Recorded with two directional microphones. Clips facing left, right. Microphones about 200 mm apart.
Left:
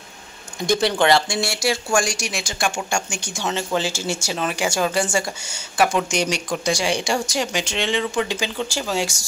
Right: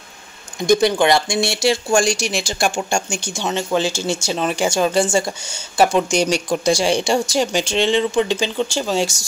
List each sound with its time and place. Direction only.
0.7 s speech: 15° right (ahead or behind)
3.4 s speech: 15° right (ahead or behind)